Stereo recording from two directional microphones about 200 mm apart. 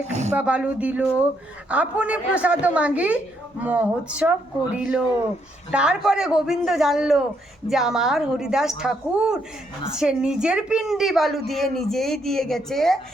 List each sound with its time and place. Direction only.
0.1 s speech: 35° right (ahead or behind)
0.3 s a woman's voice: 5° right (ahead or behind)